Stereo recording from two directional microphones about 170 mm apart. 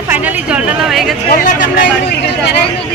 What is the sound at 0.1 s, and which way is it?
A woman's voice, 10° right (ahead or behind).